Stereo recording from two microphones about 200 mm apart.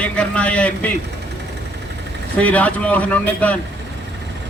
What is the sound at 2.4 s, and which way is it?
Speech, 5° left (ahead or behind).